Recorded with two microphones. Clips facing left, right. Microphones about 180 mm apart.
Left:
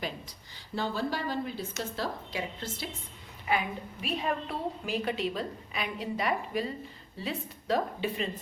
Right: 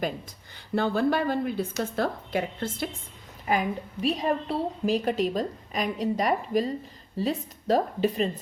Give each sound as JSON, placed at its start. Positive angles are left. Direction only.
{"t": 0.8, "sound": "speech", "side_deg": -55}
{"t": 3.4, "sound": "a woman's voice", "side_deg": -40}